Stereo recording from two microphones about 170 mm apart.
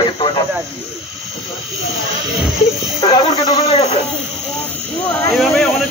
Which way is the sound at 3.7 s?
40° left (ahead or behind).